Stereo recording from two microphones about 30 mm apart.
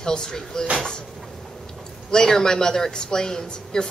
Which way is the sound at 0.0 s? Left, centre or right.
Left.